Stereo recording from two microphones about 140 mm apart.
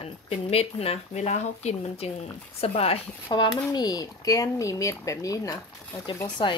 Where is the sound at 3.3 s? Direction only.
35° left (ahead or behind).